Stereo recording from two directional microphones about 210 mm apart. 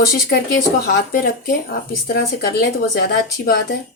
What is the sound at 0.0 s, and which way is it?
Speech, 45° left (ahead or behind).